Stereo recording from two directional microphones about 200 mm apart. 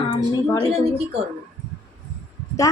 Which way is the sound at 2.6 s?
15° left (ahead or behind).